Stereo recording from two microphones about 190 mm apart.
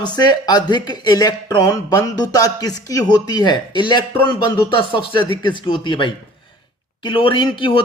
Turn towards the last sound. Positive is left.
turn(degrees=25)  # may be behind; listen again after turning